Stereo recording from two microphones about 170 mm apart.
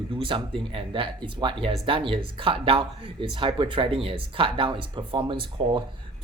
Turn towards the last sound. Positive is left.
turn(degrees=-30)  # may be behind; listen again after turning